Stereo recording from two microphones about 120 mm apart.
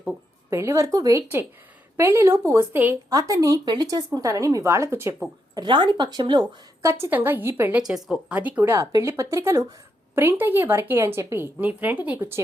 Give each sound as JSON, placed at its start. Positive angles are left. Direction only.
{"t": 0.5, "sound": "a woman's voice", "side_deg": -25}
{"t": 3.1, "sound": "a woman's voice", "side_deg": -30}
{"t": 5.5, "sound": "a woman's voice", "side_deg": -40}
{"t": 7.8, "sound": "a woman's voice", "side_deg": -5}